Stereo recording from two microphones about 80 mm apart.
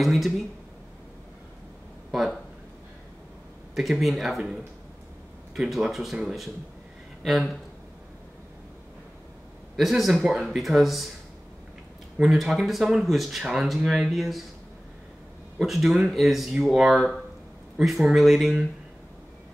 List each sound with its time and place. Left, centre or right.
0.0 s speech: centre
2.0 s a sound: centre
4.0 s speech: centre
9.8 s speech: centre
12.2 s speech: centre
15.6 s speech: centre